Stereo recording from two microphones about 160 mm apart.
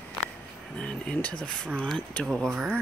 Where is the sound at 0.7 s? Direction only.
5° left (ahead or behind).